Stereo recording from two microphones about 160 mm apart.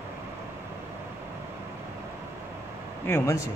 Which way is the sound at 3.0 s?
15° left (ahead or behind).